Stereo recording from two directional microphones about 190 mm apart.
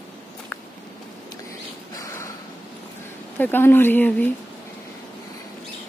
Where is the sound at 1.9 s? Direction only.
15° left (ahead or behind).